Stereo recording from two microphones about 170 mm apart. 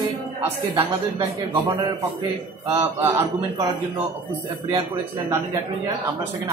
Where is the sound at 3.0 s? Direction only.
20° right (ahead or behind).